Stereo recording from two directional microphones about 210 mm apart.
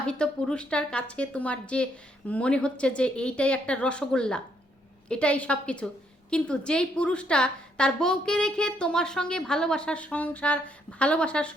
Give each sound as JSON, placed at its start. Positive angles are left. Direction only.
{"t": 0.0, "sound": "a woman's voice", "side_deg": 5}